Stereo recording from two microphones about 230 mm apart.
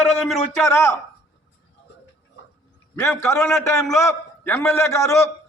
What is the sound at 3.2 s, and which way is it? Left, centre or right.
A man's voice, centre.